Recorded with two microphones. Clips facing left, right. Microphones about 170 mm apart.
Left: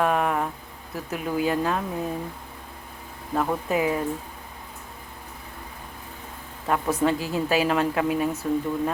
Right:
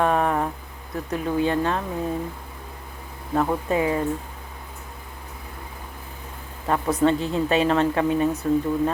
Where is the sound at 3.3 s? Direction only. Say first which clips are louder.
Right 3 dB; 5° right (ahead or behind).